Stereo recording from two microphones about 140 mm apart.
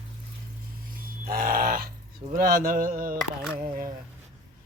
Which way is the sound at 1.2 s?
90° right.